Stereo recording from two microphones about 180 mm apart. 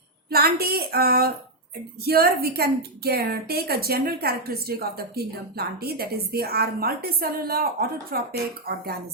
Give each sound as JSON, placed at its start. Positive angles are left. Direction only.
{"t": 0.3, "sound": "a woman's voice", "side_deg": -60}